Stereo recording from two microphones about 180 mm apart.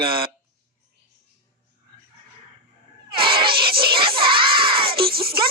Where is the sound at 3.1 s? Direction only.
30° right (ahead or behind).